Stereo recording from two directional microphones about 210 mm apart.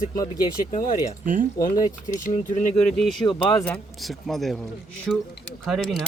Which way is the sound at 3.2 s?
20° left (ahead or behind).